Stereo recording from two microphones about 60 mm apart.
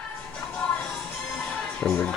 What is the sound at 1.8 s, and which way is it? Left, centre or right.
Speech, centre.